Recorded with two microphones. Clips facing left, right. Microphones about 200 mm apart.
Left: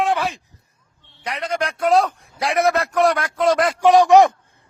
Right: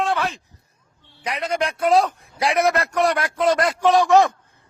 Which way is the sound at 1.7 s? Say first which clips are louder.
Left 1 dB; centre (ahead or behind).